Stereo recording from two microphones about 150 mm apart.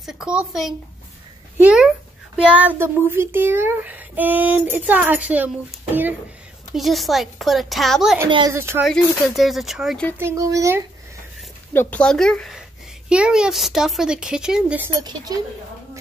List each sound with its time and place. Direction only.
0.0 s speech: 5° right (ahead or behind)
6.7 s speech: centre (ahead or behind)
8.5 s speech: 15° right (ahead or behind)
8.8 s speech: centre (ahead or behind)
10.1 s a child's voice: 20° right (ahead or behind)
11.7 s speech: 15° left (ahead or behind); by 14.9 s 5° right (ahead or behind)
15.0 s a child's voice: 25° right (ahead or behind)